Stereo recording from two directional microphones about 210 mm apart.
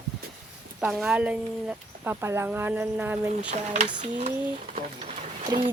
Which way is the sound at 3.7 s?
30° right (ahead or behind).